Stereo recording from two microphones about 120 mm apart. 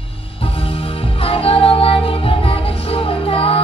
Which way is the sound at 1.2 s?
50° left (ahead or behind).